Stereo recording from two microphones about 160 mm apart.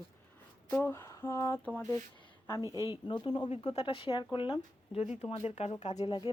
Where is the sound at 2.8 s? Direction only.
30° left (ahead or behind).